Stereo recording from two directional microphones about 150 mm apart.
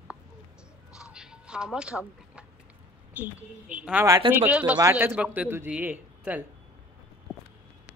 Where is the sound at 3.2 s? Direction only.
10° right (ahead or behind).